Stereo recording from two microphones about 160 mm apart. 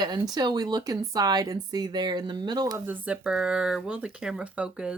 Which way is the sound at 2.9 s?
10° right (ahead or behind).